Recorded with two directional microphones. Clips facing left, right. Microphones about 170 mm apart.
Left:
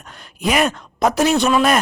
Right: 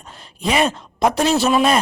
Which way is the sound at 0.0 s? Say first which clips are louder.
Even; centre (ahead or behind).